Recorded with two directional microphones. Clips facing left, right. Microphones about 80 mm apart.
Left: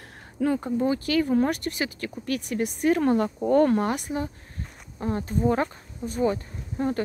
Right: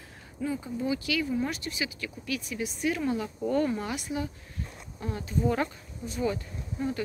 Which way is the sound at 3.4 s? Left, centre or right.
Left.